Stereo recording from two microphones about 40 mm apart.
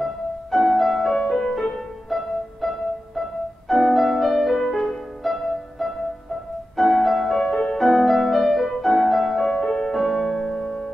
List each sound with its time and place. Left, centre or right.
0.0 s music: centre
9.6 s music: centre
9.8 s music: centre